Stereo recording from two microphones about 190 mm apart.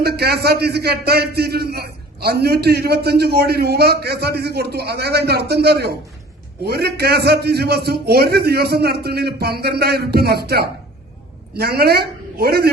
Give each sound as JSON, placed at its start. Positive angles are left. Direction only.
{"t": 0.0, "sound": "a man's voice", "side_deg": -55}